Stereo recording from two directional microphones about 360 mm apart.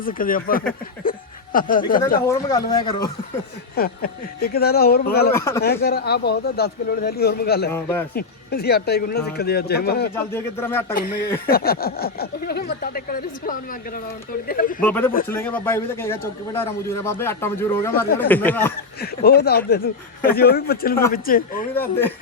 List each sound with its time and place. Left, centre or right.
0.0 s speech: left
1.1 s a sound: left
1.5 s speech: left
2.2 s a man's voice: centre
3.8 s speech: left
5.3 s a man's voice: centre
5.6 s speech: left
7.7 s a man's voice: centre
8.1 s speech: left
10.2 s a man's voice: centre
10.9 s speech: left
14.8 s a man's voice: centre
18.9 s speech: left
21.8 s speech: centre